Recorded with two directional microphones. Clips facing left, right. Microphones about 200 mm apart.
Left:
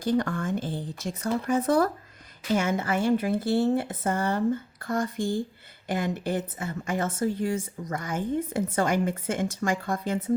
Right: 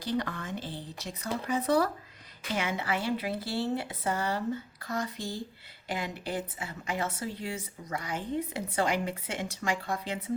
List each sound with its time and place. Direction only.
0.0 s speech: 50° left (ahead or behind)